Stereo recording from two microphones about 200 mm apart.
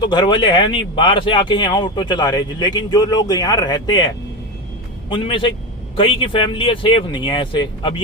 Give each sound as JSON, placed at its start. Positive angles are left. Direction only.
{"t": 0.0, "sound": "speech", "side_deg": 20}